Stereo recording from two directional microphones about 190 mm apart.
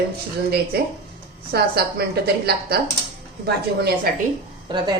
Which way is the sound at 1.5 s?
60° right (ahead or behind).